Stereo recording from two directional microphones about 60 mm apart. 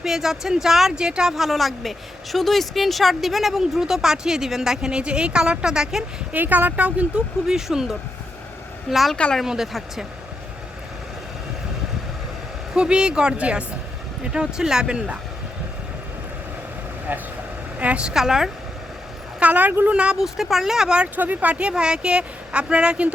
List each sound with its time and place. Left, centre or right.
0.0 s a woman's voice: centre
6.3 s speech: right
7.4 s a woman's voice: centre
12.7 s a woman's voice: centre
17.1 s a woman's voice: right
18.1 s a woman's voice: centre
19.4 s speech: right
20.1 s a woman's voice: centre
21.2 s speech: right